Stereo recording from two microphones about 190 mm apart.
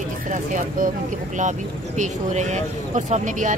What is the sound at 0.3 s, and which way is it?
Speech, 45° right (ahead or behind).